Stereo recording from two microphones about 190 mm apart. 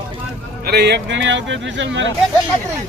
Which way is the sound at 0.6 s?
60° right (ahead or behind).